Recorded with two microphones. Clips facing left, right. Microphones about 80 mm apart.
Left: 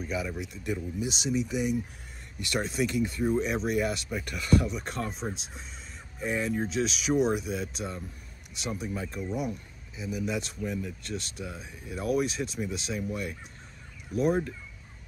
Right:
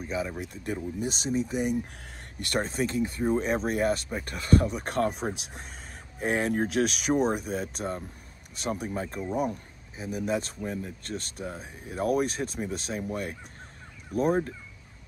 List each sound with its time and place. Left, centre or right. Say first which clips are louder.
0.0 s speech: right 1 dB; right
0.4 s speech: even; right